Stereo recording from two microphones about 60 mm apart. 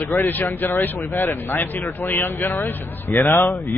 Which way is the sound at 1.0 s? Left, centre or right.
Left.